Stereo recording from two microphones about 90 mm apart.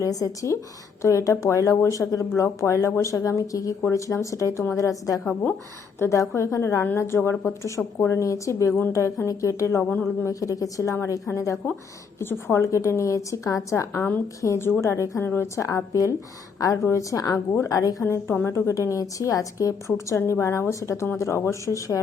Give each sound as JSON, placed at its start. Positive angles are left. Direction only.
{"t": 0.0, "sound": "a woman's voice", "side_deg": 40}
{"t": 5.2, "sound": "speech", "side_deg": 20}
{"t": 6.0, "sound": "a woman's voice", "side_deg": 30}
{"t": 18.0, "sound": "a woman's voice", "side_deg": 25}